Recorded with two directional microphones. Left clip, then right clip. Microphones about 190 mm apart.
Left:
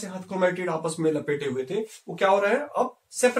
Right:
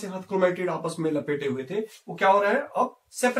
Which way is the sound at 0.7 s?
15° left (ahead or behind).